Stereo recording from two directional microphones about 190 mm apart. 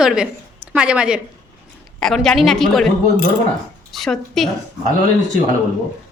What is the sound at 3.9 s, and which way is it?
Speech, centre (ahead or behind).